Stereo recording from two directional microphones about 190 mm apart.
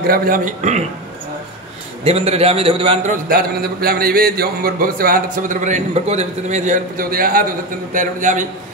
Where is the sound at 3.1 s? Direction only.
50° right (ahead or behind).